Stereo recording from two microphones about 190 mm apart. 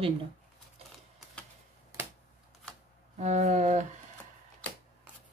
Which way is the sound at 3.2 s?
35° right (ahead or behind).